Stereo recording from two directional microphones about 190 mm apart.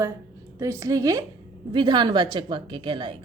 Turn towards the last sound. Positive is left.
turn(degrees=-25)  # may be behind; listen again after turning